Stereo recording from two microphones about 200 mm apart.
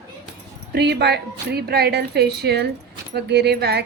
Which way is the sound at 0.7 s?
55° right (ahead or behind).